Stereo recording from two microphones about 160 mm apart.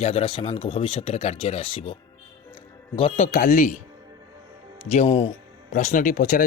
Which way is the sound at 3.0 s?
40° left (ahead or behind).